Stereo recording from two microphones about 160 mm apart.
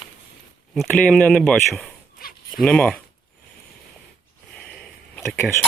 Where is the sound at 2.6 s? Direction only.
5° left (ahead or behind).